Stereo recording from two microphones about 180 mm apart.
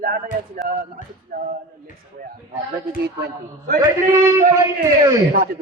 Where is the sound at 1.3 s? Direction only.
50° right (ahead or behind).